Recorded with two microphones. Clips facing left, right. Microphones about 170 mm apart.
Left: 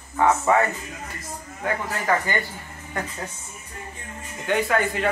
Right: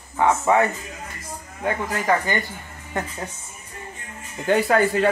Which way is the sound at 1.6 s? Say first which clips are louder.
Right 2 dB; 20° right (ahead or behind).